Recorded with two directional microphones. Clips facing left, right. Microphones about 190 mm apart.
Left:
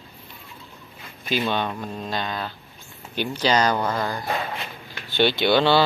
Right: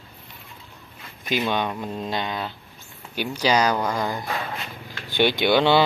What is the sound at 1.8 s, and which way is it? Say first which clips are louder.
Speech: right 1 dB; 20° right (ahead or behind).